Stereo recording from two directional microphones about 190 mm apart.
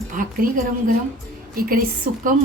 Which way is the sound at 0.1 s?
45° right (ahead or behind).